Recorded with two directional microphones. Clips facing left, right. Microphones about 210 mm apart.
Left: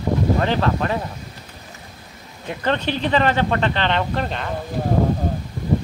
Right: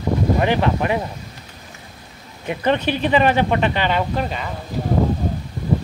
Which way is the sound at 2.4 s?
15° right (ahead or behind).